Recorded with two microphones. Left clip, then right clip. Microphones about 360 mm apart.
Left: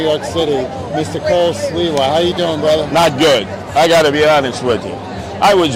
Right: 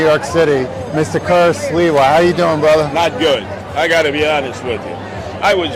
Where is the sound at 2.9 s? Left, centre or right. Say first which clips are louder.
Left 3 dB; left.